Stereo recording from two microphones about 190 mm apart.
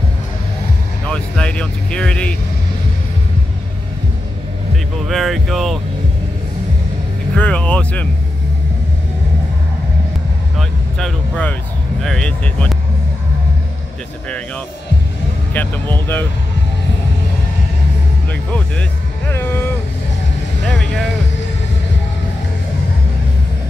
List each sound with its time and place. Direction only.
1.0 s speech: 5° left (ahead or behind)
5.0 s speech: centre (ahead or behind)
7.3 s speech: 5° left (ahead or behind)
10.6 s vehicle: centre (ahead or behind)
12.0 s speech: 5° left (ahead or behind)
15.5 s speech: 10° left (ahead or behind)
18.5 s speech: 10° left (ahead or behind)